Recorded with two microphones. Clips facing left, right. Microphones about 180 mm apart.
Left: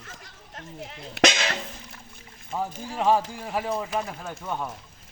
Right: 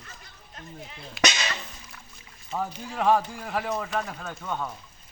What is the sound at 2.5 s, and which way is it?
Speech, 10° left (ahead or behind).